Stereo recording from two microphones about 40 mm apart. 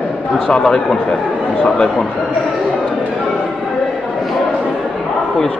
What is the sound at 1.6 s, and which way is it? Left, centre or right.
Speech, left.